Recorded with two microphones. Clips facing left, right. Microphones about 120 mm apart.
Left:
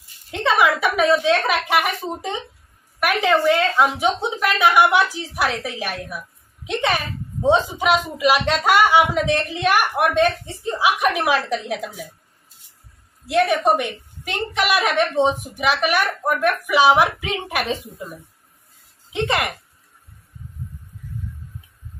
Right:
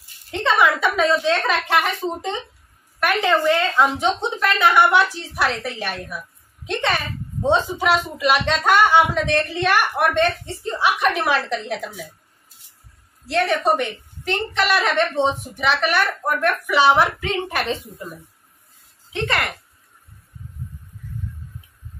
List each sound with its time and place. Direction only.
0.3 s a woman's voice: 5° left (ahead or behind)
13.3 s a woman's voice: 15° left (ahead or behind)
19.1 s a woman's voice: 15° left (ahead or behind)